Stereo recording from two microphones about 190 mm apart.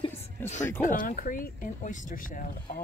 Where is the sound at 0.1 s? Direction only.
10° left (ahead or behind).